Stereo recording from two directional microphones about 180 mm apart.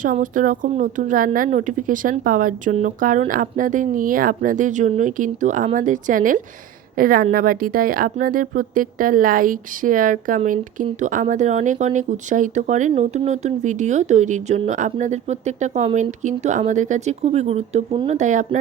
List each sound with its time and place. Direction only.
0.0 s speech: 45° right (ahead or behind)